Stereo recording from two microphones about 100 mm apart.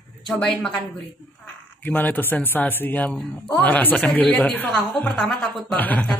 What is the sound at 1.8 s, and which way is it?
Speech, 15° left (ahead or behind).